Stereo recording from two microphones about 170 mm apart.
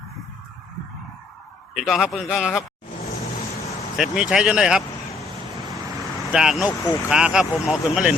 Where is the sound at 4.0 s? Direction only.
5° right (ahead or behind).